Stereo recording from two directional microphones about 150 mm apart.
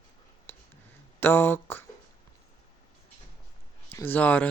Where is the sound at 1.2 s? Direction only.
15° left (ahead or behind).